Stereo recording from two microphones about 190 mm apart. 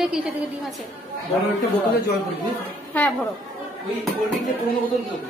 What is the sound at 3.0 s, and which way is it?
Speech, 10° left (ahead or behind).